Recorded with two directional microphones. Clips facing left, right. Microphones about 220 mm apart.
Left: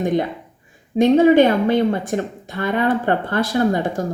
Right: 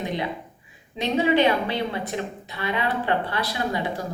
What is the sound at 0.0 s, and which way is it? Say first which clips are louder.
A woman's voice: left 8 dB; 50° left (ahead or behind).